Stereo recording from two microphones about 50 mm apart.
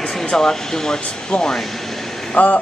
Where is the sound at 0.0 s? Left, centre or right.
Centre.